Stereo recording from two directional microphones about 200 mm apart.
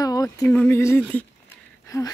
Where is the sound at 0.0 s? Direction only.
20° left (ahead or behind).